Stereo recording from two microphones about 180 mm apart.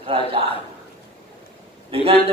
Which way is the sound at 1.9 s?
30° right (ahead or behind).